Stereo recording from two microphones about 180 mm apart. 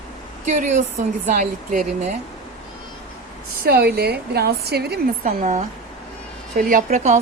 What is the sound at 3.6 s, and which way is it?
A woman's voice, 60° right (ahead or behind).